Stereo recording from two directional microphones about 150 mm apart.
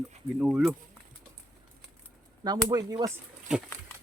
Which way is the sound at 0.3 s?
5° right (ahead or behind).